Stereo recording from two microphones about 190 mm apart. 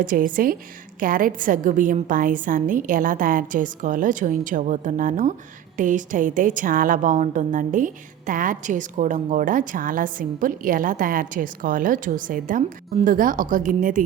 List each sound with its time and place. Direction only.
0.0 s a woman's voice: 45° right (ahead or behind)